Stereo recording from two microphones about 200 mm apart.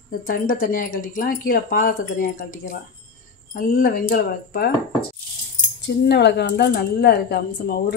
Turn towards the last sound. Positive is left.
turn(degrees=55)  # may be behind; listen again after turning